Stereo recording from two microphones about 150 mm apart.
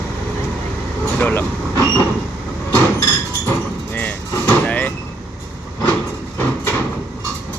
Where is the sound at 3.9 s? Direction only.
10° left (ahead or behind).